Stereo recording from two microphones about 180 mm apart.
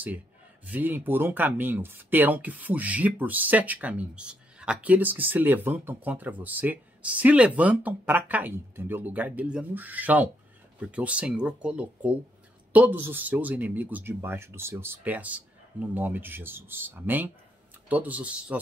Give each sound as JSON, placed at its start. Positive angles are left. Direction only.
{"t": 0.7, "sound": "speech", "side_deg": -10}